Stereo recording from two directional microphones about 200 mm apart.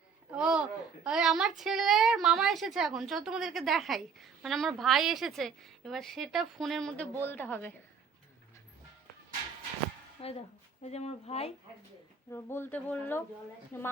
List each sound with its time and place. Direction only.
0.3 s a sound: 5° right (ahead or behind)
1.0 s a woman's voice: 5° right (ahead or behind)
10.2 s speech: 30° left (ahead or behind)
12.3 s speech: 10° left (ahead or behind)